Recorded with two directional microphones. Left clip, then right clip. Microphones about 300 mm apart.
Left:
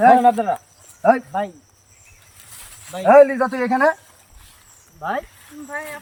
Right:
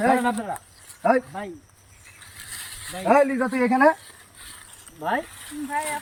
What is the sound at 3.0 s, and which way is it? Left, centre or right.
Speech, centre.